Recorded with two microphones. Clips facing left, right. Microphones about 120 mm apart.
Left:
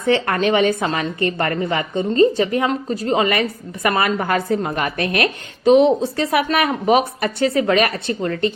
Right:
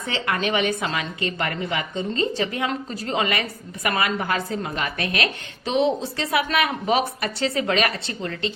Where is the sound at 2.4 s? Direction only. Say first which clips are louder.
Left 6 dB; 35° left (ahead or behind); by 4.5 s 50° left (ahead or behind).